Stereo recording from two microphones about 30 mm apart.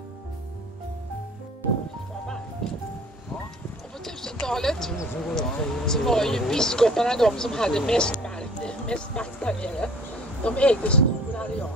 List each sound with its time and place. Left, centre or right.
4.5 s speech: centre; by 11.5 s left